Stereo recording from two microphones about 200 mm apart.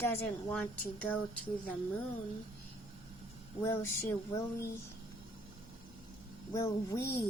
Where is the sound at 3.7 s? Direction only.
15° left (ahead or behind).